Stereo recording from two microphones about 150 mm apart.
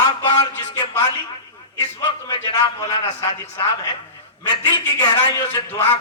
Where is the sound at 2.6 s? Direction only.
25° left (ahead or behind).